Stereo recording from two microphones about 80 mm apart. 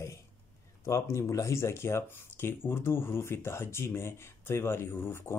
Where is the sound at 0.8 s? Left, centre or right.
Left.